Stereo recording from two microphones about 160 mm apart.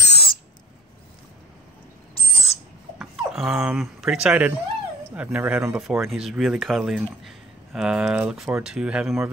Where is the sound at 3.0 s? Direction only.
Centre (ahead or behind).